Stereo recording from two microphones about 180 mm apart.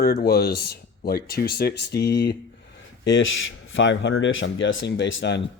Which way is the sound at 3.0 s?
90° left.